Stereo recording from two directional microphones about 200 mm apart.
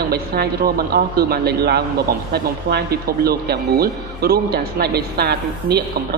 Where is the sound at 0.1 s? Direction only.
50° right (ahead or behind).